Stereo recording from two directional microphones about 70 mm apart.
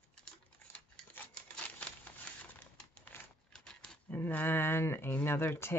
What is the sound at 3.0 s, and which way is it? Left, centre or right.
Typewriter, left.